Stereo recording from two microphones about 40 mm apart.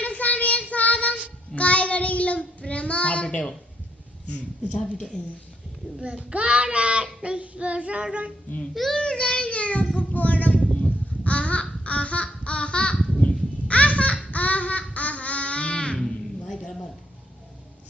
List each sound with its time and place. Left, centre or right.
0.0 s child singing: left
6.0 s child singing: right
8.7 s child singing: centre
9.0 s child singing: left
10.8 s crow: left
11.8 s babbling: left
13.1 s baby laughter: left
14.9 s babbling: left
16.0 s a sound: centre